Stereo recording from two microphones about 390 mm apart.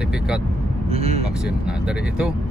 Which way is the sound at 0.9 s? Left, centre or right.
Centre.